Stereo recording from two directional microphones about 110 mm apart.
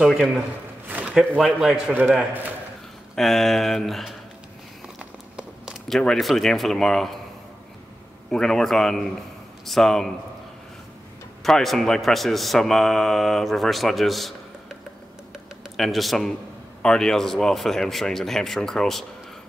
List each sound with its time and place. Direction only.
0.0 s a man's voice: 5° right (ahead or behind)
0.8 s a sound: 15° right (ahead or behind)
1.4 s a man's voice: 5° right (ahead or behind)
2.0 s a man's voice: 15° right (ahead or behind)
3.2 s a man's voice: centre (ahead or behind)
4.9 s a sound: 5° right (ahead or behind)
5.9 s a man's voice: 5° left (ahead or behind)
8.3 s a man's voice: 5° left (ahead or behind)
11.4 s a man's voice: 5° left (ahead or behind)
15.7 s a man's voice: centre (ahead or behind)